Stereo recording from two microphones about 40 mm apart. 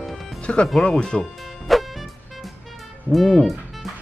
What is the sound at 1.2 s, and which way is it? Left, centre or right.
Music, centre.